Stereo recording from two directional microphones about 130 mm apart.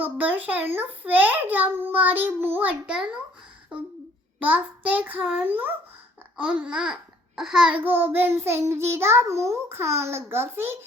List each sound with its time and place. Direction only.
0.0 s a child's voice: 10° right (ahead or behind)
4.4 s a child's voice: 10° right (ahead or behind)